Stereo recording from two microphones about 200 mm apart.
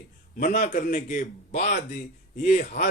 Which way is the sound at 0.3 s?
45° left (ahead or behind).